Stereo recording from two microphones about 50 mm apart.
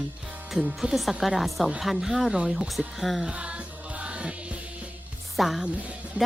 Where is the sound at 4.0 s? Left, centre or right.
Right.